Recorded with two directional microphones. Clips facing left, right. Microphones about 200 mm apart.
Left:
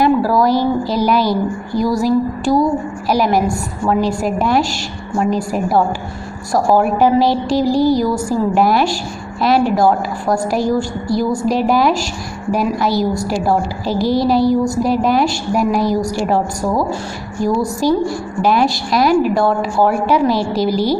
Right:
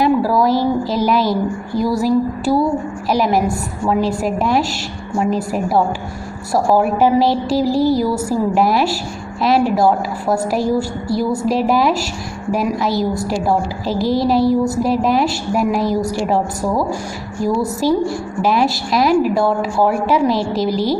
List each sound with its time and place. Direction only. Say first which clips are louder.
0.0 s a woman's voice: left 1 dB; centre (ahead or behind)